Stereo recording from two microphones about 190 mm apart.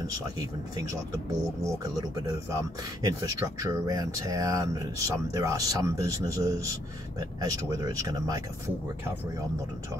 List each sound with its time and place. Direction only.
0.7 s speech: 15° right (ahead or behind)